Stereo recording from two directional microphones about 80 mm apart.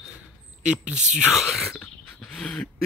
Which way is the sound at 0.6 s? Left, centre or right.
Centre.